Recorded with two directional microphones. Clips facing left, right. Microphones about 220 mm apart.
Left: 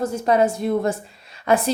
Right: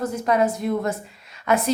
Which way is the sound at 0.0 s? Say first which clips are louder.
Left 2 dB; 30° left (ahead or behind).